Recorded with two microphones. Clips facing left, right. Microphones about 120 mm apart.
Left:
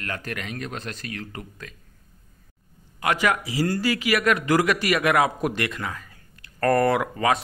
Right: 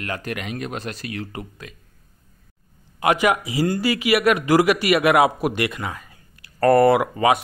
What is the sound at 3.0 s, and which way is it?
A man's voice, 20° right (ahead or behind).